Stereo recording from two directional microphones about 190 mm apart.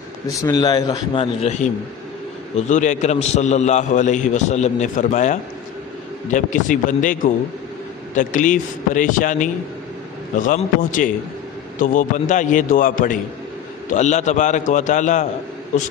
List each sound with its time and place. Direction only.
0.3 s a man's voice: 20° left (ahead or behind); by 15.2 s 40° left (ahead or behind)